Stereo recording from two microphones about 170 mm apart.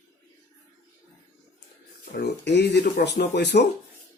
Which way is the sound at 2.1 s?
80° left.